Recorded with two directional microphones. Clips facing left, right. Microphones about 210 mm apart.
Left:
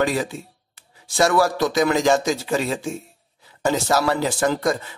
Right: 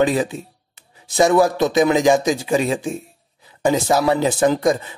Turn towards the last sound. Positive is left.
turn(degrees=-15)  # may be behind; listen again after turning